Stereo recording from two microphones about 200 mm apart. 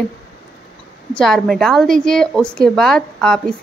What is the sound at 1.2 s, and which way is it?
A woman's voice, centre (ahead or behind).